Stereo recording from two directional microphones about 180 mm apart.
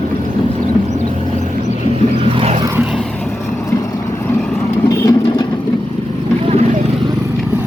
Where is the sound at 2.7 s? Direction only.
10° right (ahead or behind).